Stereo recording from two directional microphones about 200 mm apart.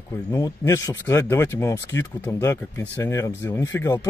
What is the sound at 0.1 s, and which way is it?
Speech, 15° left (ahead or behind).